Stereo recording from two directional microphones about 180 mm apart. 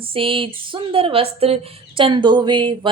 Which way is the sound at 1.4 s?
30° right (ahead or behind).